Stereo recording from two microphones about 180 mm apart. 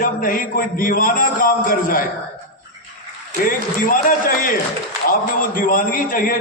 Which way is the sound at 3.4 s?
50° left (ahead or behind).